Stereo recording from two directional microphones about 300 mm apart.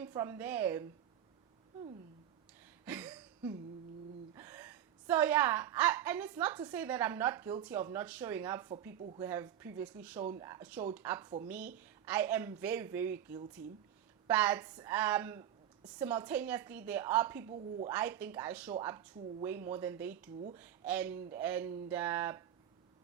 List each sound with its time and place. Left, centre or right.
0.0 s speech: centre
2.8 s a sound: centre
4.4 s a woman's voice: centre
14.3 s speech: centre